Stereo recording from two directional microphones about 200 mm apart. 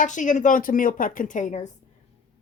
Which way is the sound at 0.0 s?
40° left (ahead or behind).